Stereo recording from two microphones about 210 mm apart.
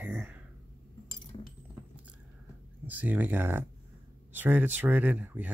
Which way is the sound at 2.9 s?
10° right (ahead or behind).